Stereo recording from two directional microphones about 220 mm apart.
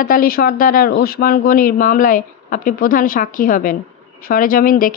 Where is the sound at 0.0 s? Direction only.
40° left (ahead or behind).